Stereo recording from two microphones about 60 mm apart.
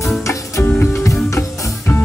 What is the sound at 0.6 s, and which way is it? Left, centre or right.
Music, left.